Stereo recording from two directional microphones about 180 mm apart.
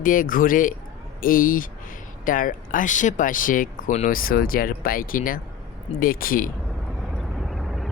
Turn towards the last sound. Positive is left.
turn(degrees=0)  # may be behind; listen again after turning